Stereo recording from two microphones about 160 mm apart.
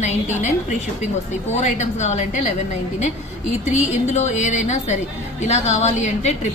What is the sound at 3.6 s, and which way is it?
A woman's voice, 45° left (ahead or behind).